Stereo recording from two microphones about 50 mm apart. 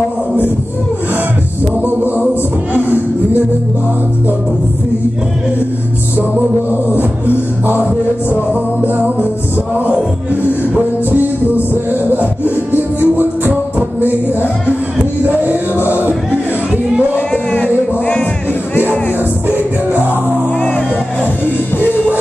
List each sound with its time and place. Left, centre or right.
6.7 s music: right
8.8 s music: right
10.7 s music: right
15.2 s music: right
15.8 s music: left
17.6 s music: left
19.5 s music: right